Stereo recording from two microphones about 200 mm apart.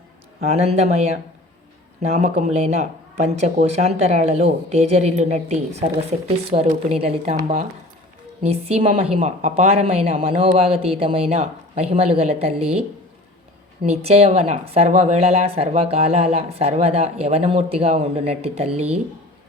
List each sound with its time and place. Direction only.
0.4 s speech: 30° right (ahead or behind)
8.4 s speech: 30° right (ahead or behind)
13.9 s speech: 30° right (ahead or behind)